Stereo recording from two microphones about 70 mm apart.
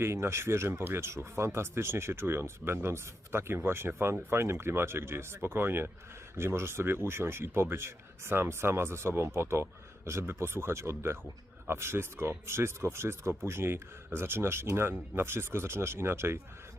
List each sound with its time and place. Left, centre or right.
0.0 s speech: right